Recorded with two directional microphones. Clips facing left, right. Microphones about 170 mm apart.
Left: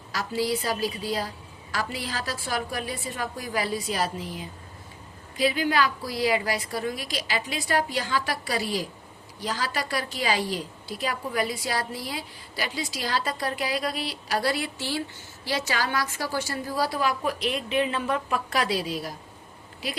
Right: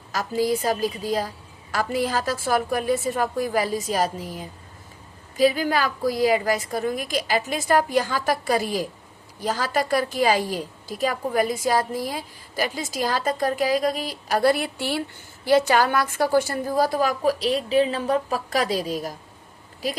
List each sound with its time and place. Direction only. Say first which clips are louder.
0.1 s a woman's voice: right 4 dB; 45° right (ahead or behind)